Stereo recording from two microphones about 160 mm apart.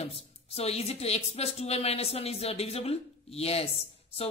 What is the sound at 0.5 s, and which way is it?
Speech, 40° left (ahead or behind).